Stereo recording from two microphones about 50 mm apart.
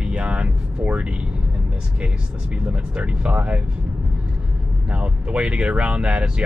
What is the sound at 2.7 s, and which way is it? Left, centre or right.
Speech, right.